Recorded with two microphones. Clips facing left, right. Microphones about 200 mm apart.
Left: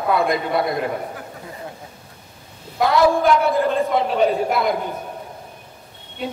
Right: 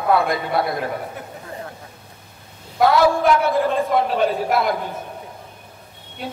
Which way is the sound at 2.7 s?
Centre (ahead or behind).